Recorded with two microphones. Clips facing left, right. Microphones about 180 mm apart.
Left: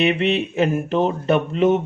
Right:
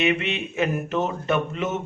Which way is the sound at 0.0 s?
35° left (ahead or behind).